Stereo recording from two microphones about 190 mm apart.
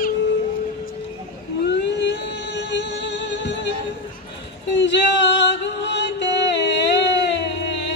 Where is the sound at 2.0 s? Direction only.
70° left (ahead or behind).